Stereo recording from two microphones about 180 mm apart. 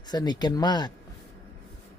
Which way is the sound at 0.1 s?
25° left (ahead or behind).